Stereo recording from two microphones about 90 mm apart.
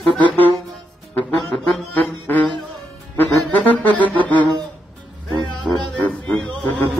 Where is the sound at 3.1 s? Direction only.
20° left (ahead or behind).